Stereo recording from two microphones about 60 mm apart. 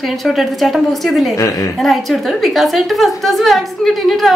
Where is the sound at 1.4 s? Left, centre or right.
Left.